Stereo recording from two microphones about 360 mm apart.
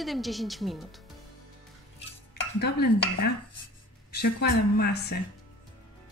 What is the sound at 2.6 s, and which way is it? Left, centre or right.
Speech, left.